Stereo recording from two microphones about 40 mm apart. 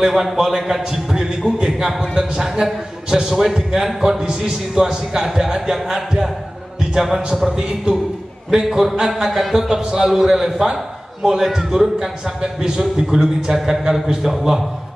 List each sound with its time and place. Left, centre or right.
0.0 s a man's voice: centre
1.1 s music: centre
1.7 s a man's voice: centre